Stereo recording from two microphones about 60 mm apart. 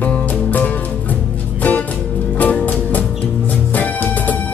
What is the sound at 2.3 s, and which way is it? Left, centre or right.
Music, left.